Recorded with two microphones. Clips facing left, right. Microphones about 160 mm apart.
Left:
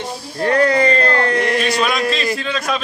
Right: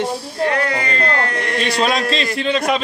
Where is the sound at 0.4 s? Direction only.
35° left (ahead or behind).